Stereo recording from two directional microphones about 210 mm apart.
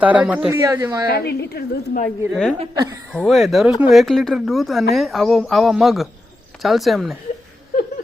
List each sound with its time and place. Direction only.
0.0 s speech: 5° right (ahead or behind)
1.1 s a woman's voice: 50° left (ahead or behind)
2.3 s speech: 5° left (ahead or behind)